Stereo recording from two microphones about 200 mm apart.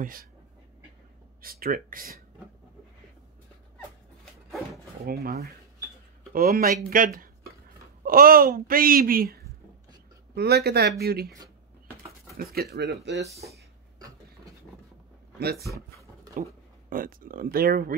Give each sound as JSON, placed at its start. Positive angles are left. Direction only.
{"t": 0.0, "sound": "speech", "side_deg": -45}
{"t": 1.4, "sound": "speech", "side_deg": -50}
{"t": 5.0, "sound": "speech", "side_deg": -50}
{"t": 12.4, "sound": "speech", "side_deg": -50}
{"t": 13.9, "sound": "a sound", "side_deg": -20}
{"t": 15.3, "sound": "speech", "side_deg": -50}
{"t": 16.9, "sound": "speech", "side_deg": -45}